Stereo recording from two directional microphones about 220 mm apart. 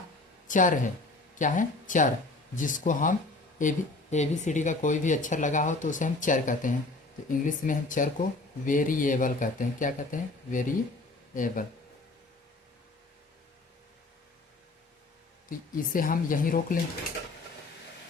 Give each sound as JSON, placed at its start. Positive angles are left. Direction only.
{"t": 0.4, "sound": "a sound", "side_deg": 35}
{"t": 1.4, "sound": "speech", "side_deg": 35}
{"t": 15.4, "sound": "speech", "side_deg": 40}